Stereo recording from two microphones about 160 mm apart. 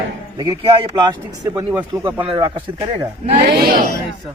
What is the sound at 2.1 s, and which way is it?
Speech, 30° right (ahead or behind).